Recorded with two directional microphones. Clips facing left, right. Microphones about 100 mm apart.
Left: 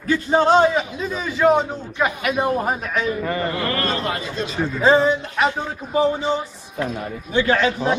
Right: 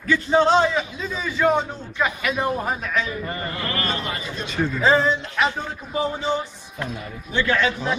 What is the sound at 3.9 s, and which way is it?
Speech, 35° left (ahead or behind).